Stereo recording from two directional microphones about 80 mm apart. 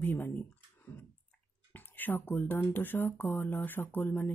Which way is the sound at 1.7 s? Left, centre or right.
Left.